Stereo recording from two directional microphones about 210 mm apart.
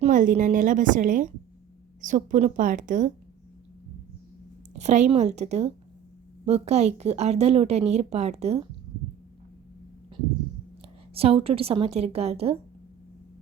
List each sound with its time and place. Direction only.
0.0 s a woman's voice: 40° right (ahead or behind)
4.7 s a woman's voice: 35° right (ahead or behind)
11.1 s a woman's voice: 25° right (ahead or behind)